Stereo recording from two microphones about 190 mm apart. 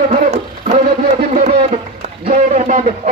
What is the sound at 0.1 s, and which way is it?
Music, 40° right (ahead or behind).